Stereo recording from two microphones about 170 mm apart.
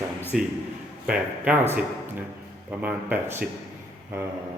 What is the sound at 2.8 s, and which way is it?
Speech, 10° right (ahead or behind).